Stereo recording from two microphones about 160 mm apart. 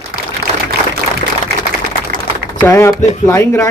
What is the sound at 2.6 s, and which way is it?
A man's voice, 15° left (ahead or behind).